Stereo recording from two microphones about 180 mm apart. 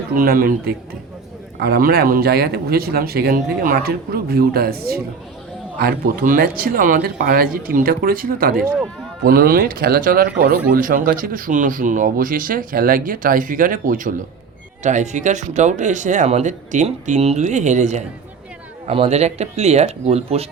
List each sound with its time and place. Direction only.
0.1 s speech: 50° right (ahead or behind); by 20.5 s 35° right (ahead or behind)